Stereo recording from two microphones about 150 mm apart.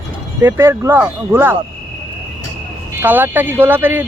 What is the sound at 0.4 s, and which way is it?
Speech, 15° right (ahead or behind).